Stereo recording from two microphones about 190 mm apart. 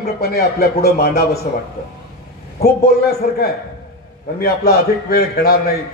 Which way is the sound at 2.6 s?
55° left (ahead or behind).